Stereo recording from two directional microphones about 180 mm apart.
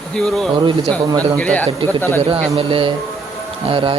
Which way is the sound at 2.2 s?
30° right (ahead or behind).